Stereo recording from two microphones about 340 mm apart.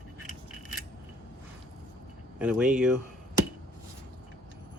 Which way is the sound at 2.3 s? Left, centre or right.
Centre.